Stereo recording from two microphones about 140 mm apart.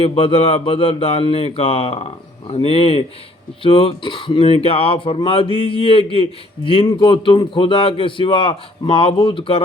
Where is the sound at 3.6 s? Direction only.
40° left (ahead or behind).